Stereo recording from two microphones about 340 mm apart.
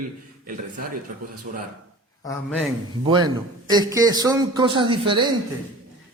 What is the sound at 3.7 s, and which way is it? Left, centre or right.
A man's voice, centre.